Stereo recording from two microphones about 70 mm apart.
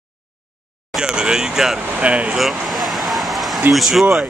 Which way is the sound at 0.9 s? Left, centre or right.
Centre.